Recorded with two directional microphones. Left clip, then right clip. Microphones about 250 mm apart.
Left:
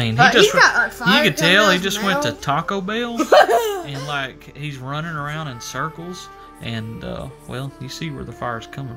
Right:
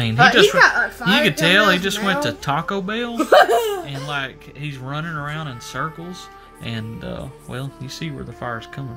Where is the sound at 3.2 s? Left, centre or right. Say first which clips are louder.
Even; left.